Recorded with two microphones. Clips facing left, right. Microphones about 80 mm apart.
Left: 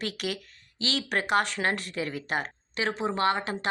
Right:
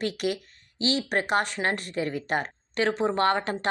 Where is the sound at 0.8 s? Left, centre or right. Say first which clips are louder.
Right 3 dB; right.